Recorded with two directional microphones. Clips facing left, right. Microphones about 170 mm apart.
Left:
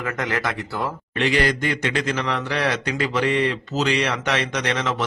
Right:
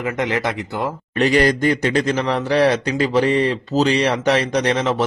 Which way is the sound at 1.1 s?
40° right (ahead or behind).